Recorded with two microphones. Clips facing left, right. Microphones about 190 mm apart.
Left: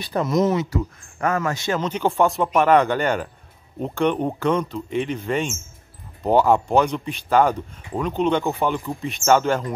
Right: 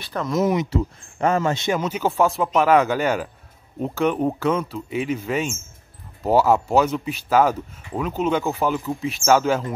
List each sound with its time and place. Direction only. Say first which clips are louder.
0.0 s speech: left 4 dB; 15° left (ahead or behind)
0.3 s speech: even; 10° right (ahead or behind)
0.7 s speech: right 2 dB; 25° right (ahead or behind)
1.7 s speech: even; 10° right (ahead or behind)